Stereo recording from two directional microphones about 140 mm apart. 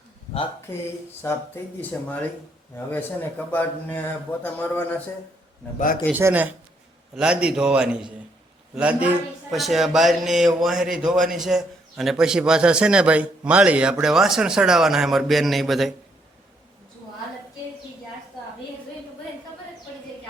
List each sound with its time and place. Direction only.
0.7 s a man's voice: 15° left (ahead or behind)
6.1 s a man's voice: 15° right (ahead or behind)